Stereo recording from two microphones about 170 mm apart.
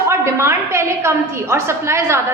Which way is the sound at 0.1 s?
15° right (ahead or behind).